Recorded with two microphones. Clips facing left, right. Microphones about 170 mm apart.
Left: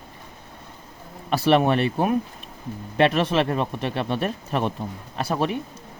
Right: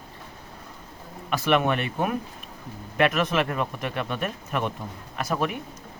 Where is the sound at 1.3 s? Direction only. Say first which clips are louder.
Left 4 dB; 35° left (ahead or behind).